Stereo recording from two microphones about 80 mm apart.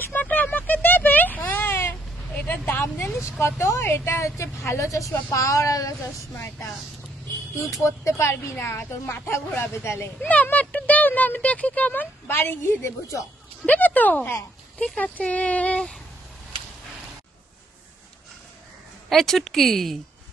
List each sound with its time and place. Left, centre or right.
0.0 s a sound: left
2.3 s vehicle: left
3.3 s a woman's voice: left
7.5 s a woman's voice: left
10.2 s speech: centre
13.7 s speech: left
19.0 s speech: centre